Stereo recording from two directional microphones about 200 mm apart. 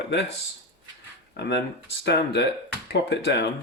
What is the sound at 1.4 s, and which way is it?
Speech, 60° left (ahead or behind).